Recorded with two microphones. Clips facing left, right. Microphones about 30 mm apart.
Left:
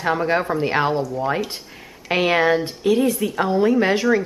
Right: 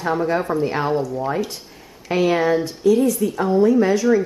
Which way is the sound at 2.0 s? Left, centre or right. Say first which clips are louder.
Even; left.